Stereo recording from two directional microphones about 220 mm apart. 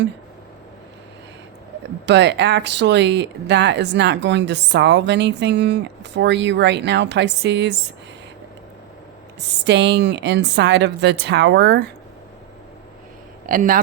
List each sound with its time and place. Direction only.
2.0 s speech: 50° right (ahead or behind)
9.4 s speech: 50° right (ahead or behind)
13.5 s speech: 40° right (ahead or behind)